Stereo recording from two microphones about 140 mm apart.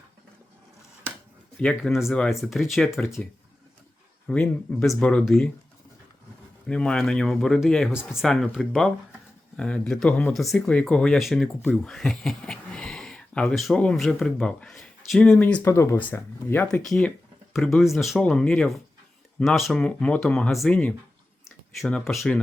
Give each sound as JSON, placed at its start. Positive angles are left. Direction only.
{"t": 1.6, "sound": "speech", "side_deg": 0}
{"t": 4.3, "sound": "speech", "side_deg": 5}
{"t": 6.7, "sound": "speech", "side_deg": 5}
{"t": 16.6, "sound": "speech", "side_deg": 5}